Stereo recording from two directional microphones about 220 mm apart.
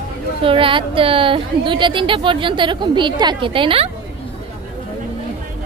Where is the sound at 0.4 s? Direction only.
25° right (ahead or behind).